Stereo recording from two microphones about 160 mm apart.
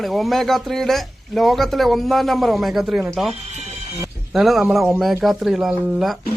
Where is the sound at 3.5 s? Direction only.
45° right (ahead or behind).